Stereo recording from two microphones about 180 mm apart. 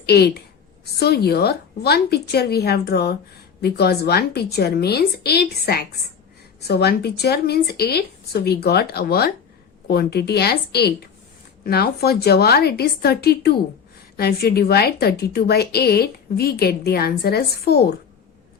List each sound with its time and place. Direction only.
0.0 s a woman's voice: 65° left (ahead or behind)